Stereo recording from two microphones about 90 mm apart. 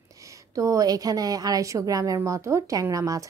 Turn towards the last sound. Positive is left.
turn(degrees=-40)  # may be behind; listen again after turning